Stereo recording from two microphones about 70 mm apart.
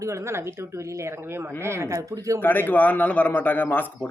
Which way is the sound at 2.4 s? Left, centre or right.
Left.